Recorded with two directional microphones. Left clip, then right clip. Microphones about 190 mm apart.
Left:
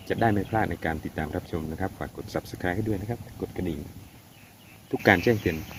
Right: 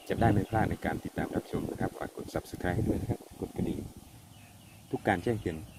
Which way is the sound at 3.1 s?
10° left (ahead or behind).